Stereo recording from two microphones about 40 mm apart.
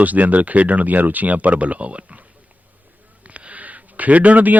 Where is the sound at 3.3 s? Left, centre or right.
Right.